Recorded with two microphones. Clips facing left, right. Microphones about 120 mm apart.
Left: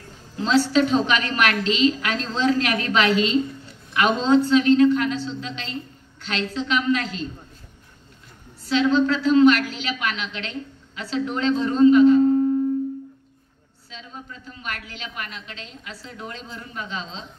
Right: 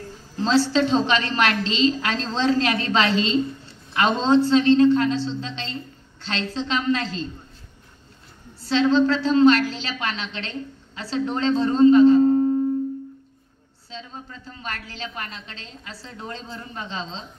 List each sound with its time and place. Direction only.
0.4 s a woman's voice: 30° right (ahead or behind)
8.6 s a woman's voice: 30° right (ahead or behind)
13.8 s a woman's voice: 30° right (ahead or behind)